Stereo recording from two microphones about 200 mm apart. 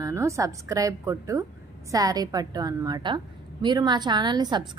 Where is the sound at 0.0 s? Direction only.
15° right (ahead or behind).